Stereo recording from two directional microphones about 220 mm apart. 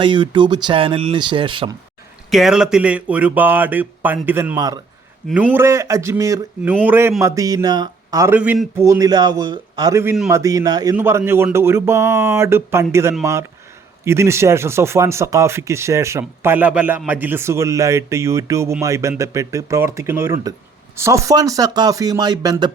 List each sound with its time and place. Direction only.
0.0 s speech: 20° right (ahead or behind)
2.3 s speech: centre (ahead or behind); by 22.7 s 15° right (ahead or behind)